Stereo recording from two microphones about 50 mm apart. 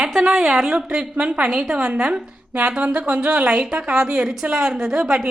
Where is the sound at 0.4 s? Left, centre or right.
Centre.